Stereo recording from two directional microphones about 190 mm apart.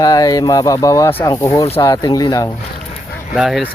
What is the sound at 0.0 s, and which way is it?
Speech, 20° left (ahead or behind).